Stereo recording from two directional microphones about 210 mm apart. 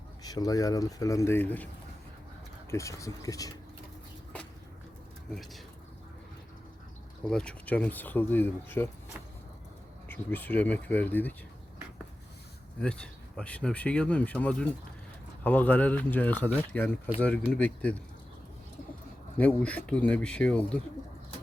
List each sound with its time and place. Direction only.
0.2 s speech: 20° left (ahead or behind)
5.3 s speech: centre (ahead or behind)
7.3 s speech: 5° left (ahead or behind)
10.1 s speech: 10° left (ahead or behind)
12.8 s speech: 5° left (ahead or behind)
19.4 s speech: 5° left (ahead or behind)